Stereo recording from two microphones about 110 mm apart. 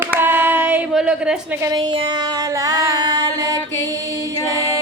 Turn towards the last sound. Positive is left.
turn(degrees=-40)  # may be behind; listen again after turning